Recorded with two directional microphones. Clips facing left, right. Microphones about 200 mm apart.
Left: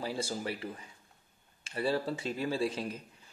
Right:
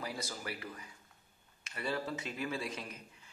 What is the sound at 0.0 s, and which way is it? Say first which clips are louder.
A man's voice: left 6 dB; 30° left (ahead or behind).